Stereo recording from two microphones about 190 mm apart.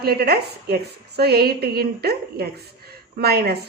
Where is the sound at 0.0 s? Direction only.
55° right (ahead or behind).